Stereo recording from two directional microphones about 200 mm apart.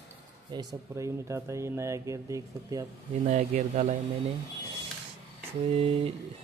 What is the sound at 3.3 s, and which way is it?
Speech, 40° right (ahead or behind).